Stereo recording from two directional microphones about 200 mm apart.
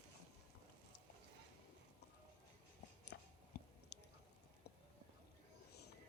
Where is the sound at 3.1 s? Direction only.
55° left (ahead or behind).